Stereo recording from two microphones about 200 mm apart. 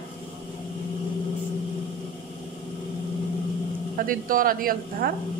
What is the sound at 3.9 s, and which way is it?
A woman's voice, 45° right (ahead or behind).